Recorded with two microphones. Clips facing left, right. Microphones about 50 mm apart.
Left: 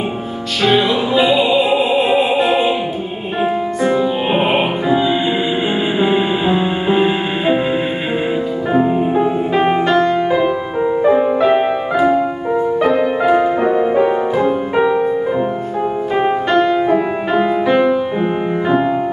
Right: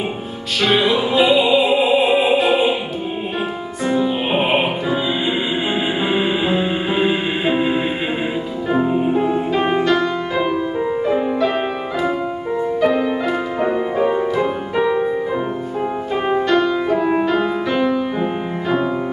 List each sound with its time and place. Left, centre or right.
0.6 s music: centre
3.9 s music: centre
8.7 s music: centre
12.8 s music: centre
16.2 s music: centre